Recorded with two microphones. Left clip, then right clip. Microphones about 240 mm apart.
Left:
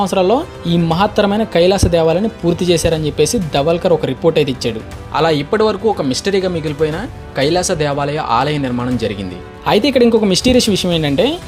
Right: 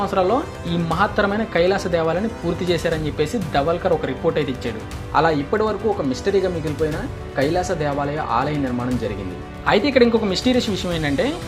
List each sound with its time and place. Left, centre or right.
0.0 s speech: left
5.1 s speech: left
9.6 s speech: left